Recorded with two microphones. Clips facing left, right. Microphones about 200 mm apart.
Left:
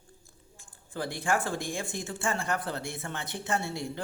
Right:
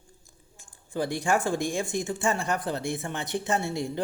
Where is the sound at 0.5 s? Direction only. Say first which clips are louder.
Right 6 dB; 15° right (ahead or behind).